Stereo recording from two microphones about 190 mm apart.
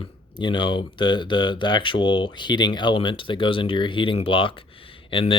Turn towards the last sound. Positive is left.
turn(degrees=30)  # may be behind; listen again after turning